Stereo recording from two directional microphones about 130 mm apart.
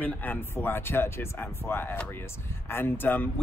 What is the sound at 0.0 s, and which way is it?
Speech, 15° left (ahead or behind).